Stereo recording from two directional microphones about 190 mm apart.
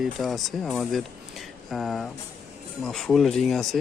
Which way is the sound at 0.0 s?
Centre (ahead or behind).